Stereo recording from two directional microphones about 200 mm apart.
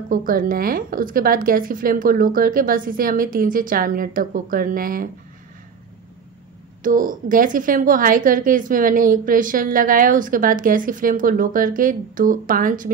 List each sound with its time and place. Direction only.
0.1 s a woman's voice: 45° right (ahead or behind)
6.8 s a woman's voice: 45° right (ahead or behind)